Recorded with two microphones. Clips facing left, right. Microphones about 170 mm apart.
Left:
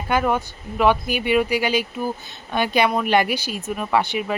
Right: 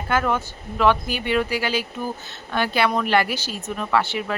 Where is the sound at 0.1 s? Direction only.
15° left (ahead or behind).